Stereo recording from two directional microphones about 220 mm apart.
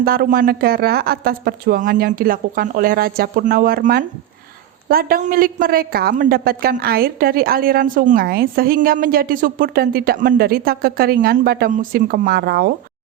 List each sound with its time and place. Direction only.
0.0 s a man's voice: 40° right (ahead or behind)